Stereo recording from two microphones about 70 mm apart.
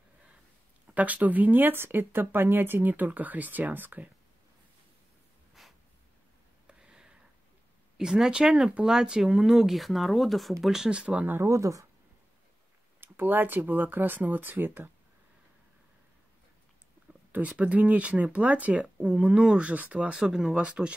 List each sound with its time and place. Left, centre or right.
0.9 s speech: right
5.6 s snort: centre
6.7 s a sound: centre
8.0 s speech: centre
11.4 s speech: right
13.0 s speech: right
17.3 s speech: centre